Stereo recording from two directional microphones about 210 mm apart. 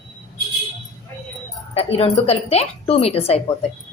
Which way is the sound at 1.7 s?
30° left (ahead or behind).